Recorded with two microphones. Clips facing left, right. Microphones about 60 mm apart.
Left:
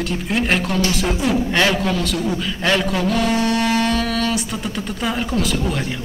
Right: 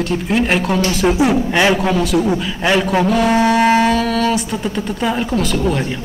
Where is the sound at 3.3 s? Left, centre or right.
Centre.